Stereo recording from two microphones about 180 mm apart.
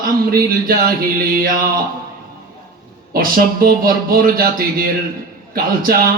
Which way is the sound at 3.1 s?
55° right (ahead or behind).